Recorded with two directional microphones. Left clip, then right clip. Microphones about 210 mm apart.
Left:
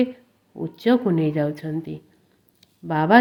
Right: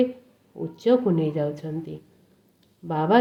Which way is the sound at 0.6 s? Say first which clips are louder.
Even; 25° left (ahead or behind).